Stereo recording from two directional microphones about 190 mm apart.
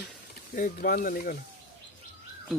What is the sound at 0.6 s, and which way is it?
Speech, 50° left (ahead or behind).